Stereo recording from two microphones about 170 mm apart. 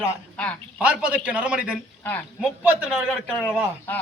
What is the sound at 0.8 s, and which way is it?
A man's voice, 5° right (ahead or behind).